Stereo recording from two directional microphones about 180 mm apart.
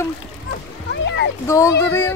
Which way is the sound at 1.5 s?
15° left (ahead or behind).